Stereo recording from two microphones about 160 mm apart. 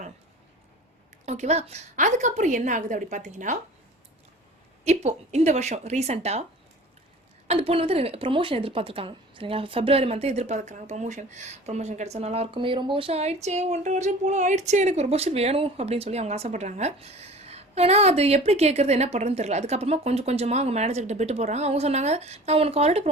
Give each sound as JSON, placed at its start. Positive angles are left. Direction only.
{"t": 1.2, "sound": "a woman's voice", "side_deg": -45}
{"t": 4.8, "sound": "a woman's voice", "side_deg": -45}
{"t": 7.4, "sound": "a woman's voice", "side_deg": -40}